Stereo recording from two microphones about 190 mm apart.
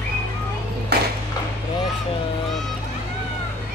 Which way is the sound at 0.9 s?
60° right (ahead or behind).